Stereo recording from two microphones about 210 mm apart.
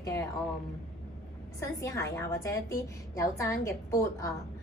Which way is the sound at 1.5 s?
15° left (ahead or behind).